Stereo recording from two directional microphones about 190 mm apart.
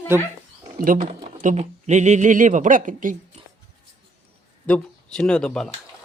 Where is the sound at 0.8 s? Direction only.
45° right (ahead or behind).